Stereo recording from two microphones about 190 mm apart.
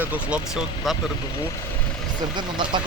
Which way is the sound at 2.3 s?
25° right (ahead or behind).